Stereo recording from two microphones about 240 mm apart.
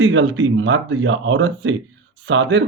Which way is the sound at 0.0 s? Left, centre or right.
Right.